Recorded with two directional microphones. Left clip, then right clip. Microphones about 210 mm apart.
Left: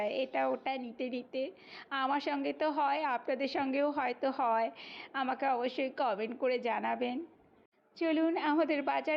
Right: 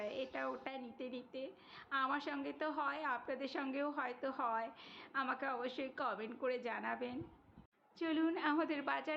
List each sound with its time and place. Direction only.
0.0 s a woman's voice: 30° left (ahead or behind)